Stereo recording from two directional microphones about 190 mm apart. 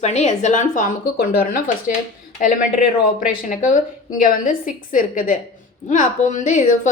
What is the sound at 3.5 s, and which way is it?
A woman's voice, 45° left (ahead or behind).